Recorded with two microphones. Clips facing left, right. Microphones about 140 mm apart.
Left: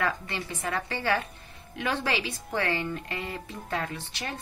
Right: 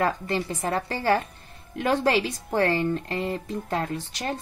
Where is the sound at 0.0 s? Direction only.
40° right (ahead or behind).